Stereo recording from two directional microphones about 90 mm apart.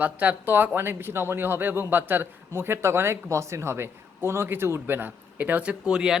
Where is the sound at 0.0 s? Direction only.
15° right (ahead or behind).